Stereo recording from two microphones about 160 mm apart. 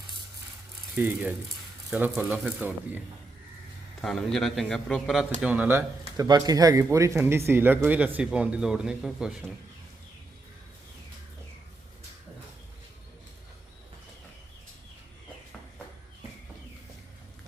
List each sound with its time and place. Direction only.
0.9 s speech: 10° right (ahead or behind)
4.0 s speech: centre (ahead or behind); by 6.2 s 15° right (ahead or behind)
6.2 s speech: 25° right (ahead or behind); by 9.4 s 5° right (ahead or behind)